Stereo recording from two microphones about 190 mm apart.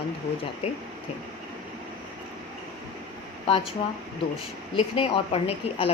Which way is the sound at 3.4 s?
30° left (ahead or behind).